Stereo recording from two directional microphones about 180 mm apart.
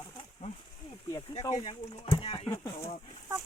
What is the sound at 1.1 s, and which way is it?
Speech, 20° left (ahead or behind).